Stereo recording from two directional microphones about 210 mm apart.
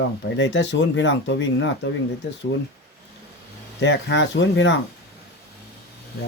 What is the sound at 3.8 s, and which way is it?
Speech, 55° left (ahead or behind).